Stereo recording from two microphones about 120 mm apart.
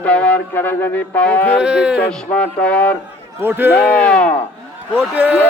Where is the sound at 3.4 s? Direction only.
20° right (ahead or behind).